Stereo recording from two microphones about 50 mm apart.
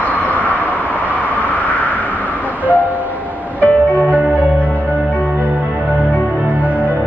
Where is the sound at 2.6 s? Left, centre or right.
Left.